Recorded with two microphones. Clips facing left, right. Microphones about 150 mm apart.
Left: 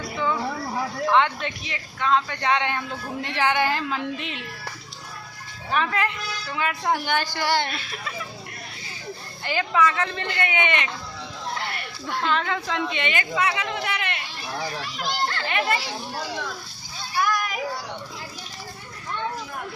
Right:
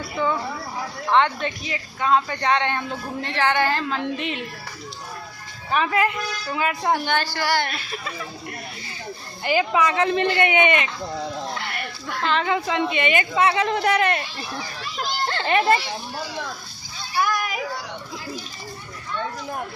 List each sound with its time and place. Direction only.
1.1 s a woman's voice: centre (ahead or behind)
5.7 s a woman's voice: 5° right (ahead or behind)
6.9 s a woman's voice: 10° left (ahead or behind)
9.4 s speech: 10° right (ahead or behind)
12.2 s a woman's voice: centre (ahead or behind)
13.3 s speech: 30° right (ahead or behind)
15.3 s a child's voice: 30° right (ahead or behind)
17.2 s children playing: 5° right (ahead or behind)